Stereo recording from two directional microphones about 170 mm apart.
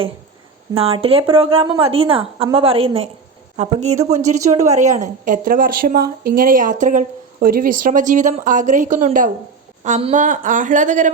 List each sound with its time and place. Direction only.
0.8 s a woman's voice: 35° right (ahead or behind)